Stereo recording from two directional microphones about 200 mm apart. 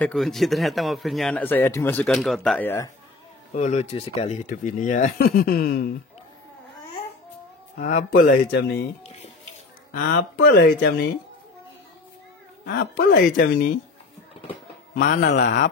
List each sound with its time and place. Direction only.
0.0 s a man's voice: centre (ahead or behind)
3.5 s speech: 35° left (ahead or behind); by 5.9 s 50° left (ahead or behind)
7.7 s speech: 40° left (ahead or behind); by 8.8 s 55° left (ahead or behind)
9.0 s a sound: 30° left (ahead or behind)
9.9 s speech: 50° left (ahead or behind)
12.6 s speech: 50° left (ahead or behind)
15.0 s speech: 50° left (ahead or behind)